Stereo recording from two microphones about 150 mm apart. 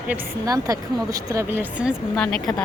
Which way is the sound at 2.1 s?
5° left (ahead or behind).